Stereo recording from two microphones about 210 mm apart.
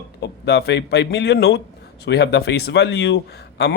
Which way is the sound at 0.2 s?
50° left (ahead or behind).